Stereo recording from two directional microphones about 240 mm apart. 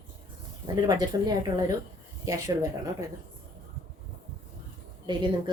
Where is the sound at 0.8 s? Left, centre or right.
Centre.